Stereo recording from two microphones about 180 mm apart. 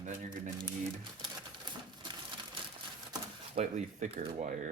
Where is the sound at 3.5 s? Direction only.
40° right (ahead or behind).